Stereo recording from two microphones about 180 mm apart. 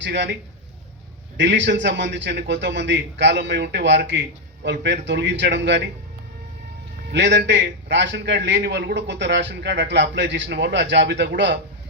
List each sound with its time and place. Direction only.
0.0 s a man's voice: 75° right (ahead or behind)
1.4 s a man's voice: 85° right
7.1 s a man's voice: 80° right